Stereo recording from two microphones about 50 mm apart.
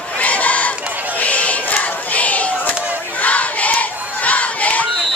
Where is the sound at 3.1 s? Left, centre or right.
Left.